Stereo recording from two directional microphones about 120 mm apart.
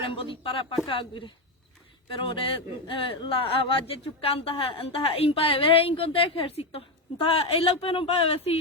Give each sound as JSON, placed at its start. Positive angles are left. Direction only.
{"t": 0.1, "sound": "a woman's voice", "side_deg": 45}